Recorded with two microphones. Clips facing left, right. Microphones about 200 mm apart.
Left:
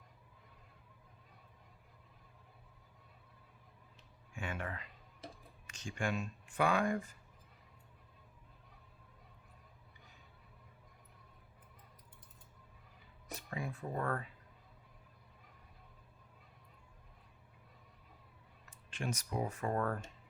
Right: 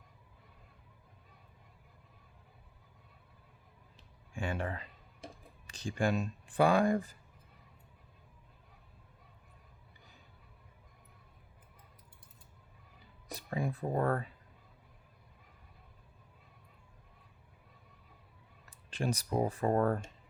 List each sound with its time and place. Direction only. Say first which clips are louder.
4.4 s speech: right 6 dB; 30° right (ahead or behind)
13.3 s speech: right 6 dB; 35° right (ahead or behind)
18.9 s speech: right 6 dB; 35° right (ahead or behind)